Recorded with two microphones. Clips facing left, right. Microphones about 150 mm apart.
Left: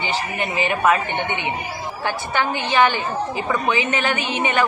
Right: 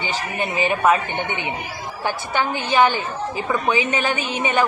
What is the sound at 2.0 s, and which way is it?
A woman's voice, 15° right (ahead or behind).